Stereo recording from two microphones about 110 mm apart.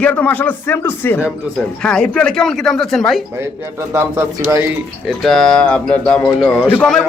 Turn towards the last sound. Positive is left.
turn(degrees=10)  # may be behind; listen again after turning